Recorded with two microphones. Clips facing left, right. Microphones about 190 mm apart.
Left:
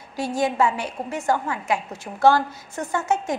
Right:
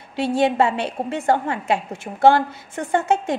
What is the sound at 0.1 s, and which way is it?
A woman's voice, 30° right (ahead or behind).